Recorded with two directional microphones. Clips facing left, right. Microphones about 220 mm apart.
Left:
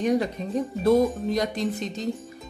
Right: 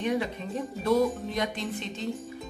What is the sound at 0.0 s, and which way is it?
A woman's voice, 40° left (ahead or behind).